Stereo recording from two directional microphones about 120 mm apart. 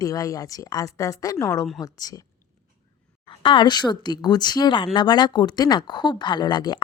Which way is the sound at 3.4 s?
40° left (ahead or behind).